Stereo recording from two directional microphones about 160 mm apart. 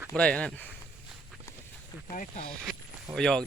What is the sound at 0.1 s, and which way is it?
Speech, 5° left (ahead or behind).